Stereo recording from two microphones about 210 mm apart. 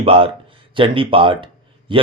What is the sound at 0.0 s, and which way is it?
Speech, 25° right (ahead or behind).